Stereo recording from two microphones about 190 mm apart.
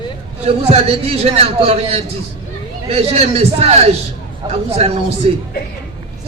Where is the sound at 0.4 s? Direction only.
30° right (ahead or behind).